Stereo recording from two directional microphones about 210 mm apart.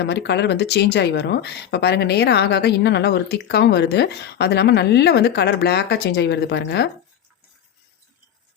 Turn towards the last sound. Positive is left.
turn(degrees=55)  # may be behind; listen again after turning